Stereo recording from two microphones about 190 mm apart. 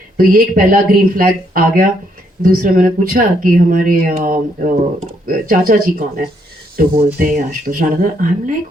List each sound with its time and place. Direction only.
0.2 s speech: 45° right (ahead or behind)